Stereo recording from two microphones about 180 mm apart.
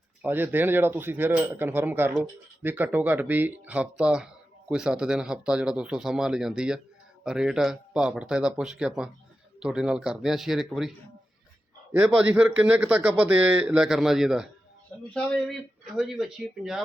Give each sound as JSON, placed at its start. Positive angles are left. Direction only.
{"t": 0.2, "sound": "speech", "side_deg": -10}
{"t": 11.9, "sound": "speech", "side_deg": -5}